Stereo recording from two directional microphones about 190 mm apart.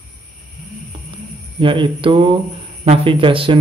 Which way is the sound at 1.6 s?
25° right (ahead or behind).